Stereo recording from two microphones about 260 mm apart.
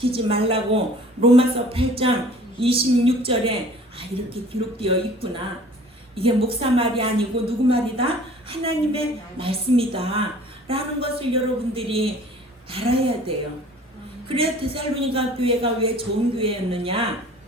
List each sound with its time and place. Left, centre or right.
0.1 s speech: right